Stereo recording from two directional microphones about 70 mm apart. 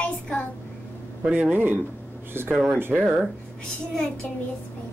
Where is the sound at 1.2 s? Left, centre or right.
Right.